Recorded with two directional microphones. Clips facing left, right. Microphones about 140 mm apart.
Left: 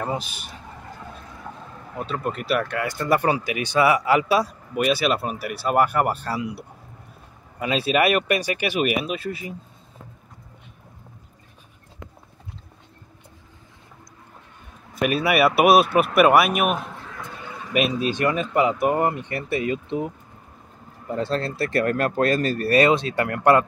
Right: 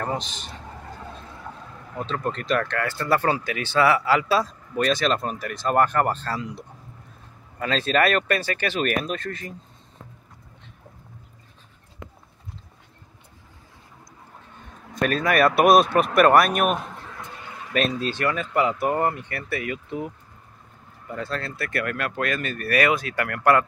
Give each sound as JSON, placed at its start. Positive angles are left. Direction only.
{"t": 0.0, "sound": "speech", "side_deg": 10}
{"t": 2.0, "sound": "speech", "side_deg": 10}
{"t": 15.0, "sound": "speech", "side_deg": 10}
{"t": 17.7, "sound": "speech", "side_deg": 10}
{"t": 21.1, "sound": "speech", "side_deg": 30}